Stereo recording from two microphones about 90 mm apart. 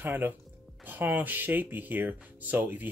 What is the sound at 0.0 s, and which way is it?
Speech, 20° right (ahead or behind).